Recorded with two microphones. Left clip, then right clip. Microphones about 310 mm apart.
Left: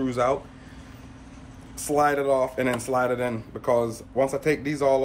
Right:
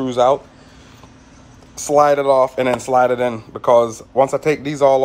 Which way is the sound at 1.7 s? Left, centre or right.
Centre.